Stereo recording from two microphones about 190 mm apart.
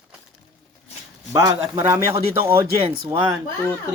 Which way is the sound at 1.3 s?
15° right (ahead or behind).